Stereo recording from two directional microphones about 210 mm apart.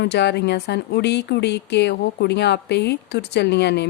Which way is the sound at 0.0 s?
55° left (ahead or behind).